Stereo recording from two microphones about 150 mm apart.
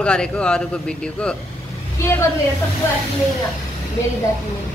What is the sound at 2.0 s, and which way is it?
Speech, 20° left (ahead or behind).